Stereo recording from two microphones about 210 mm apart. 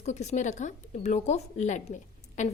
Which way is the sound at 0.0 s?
35° left (ahead or behind).